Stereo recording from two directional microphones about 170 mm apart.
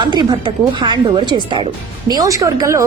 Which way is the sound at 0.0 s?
25° right (ahead or behind).